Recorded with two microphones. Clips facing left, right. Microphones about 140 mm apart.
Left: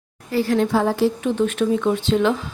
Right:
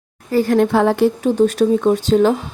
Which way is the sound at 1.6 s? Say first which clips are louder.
Right 5 dB; 40° right (ahead or behind).